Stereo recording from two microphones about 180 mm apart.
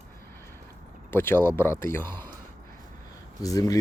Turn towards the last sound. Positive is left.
turn(degrees=20)  # may be behind; listen again after turning